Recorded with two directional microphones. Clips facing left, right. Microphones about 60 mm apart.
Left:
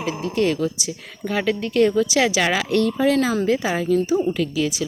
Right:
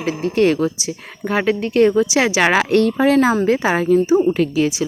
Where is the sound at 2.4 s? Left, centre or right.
Right.